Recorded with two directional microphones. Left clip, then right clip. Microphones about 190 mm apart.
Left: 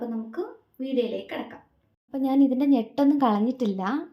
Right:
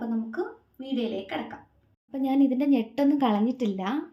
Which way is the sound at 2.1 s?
15° left (ahead or behind).